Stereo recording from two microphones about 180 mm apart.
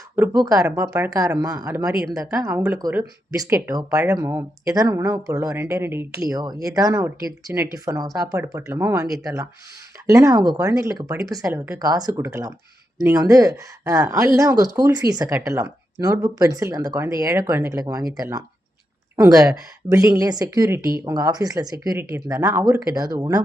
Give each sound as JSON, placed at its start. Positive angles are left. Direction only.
{"t": 0.2, "sound": "speech", "side_deg": -20}
{"t": 1.9, "sound": "speech", "side_deg": -5}
{"t": 2.1, "sound": "speech", "side_deg": -20}